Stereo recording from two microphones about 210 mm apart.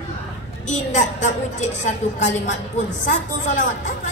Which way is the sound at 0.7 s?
35° left (ahead or behind).